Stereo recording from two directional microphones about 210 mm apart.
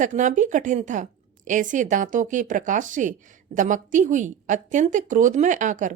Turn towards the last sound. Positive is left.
turn(degrees=-35)  # may be behind; listen again after turning